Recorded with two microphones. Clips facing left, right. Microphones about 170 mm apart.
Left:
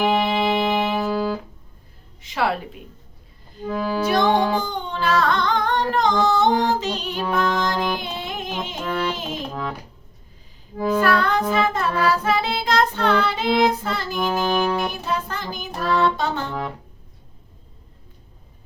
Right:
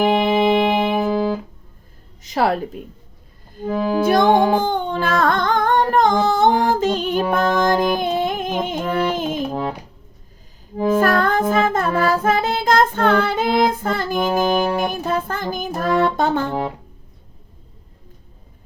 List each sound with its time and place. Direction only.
0.0 s music: 50° right (ahead or behind)
2.2 s a woman's voice: 40° right (ahead or behind)
3.7 s music: 15° right (ahead or behind)
4.5 s singing: 50° right (ahead or behind)
9.5 s speech: 35° right (ahead or behind)
10.8 s music: 20° right (ahead or behind)
11.0 s music: 45° right (ahead or behind)
14.4 s music: 10° right (ahead or behind)
14.8 s music: 50° right (ahead or behind)